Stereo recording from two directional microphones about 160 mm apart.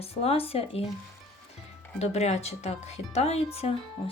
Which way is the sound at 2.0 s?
45° left (ahead or behind).